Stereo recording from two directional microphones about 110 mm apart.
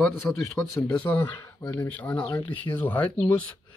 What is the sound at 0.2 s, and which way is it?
Speech, 15° left (ahead or behind).